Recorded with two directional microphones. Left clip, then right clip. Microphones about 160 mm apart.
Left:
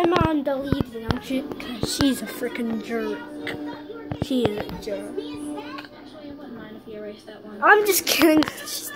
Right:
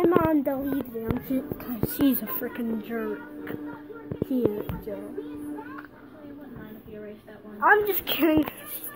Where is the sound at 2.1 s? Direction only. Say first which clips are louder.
Left 2 dB; centre (ahead or behind).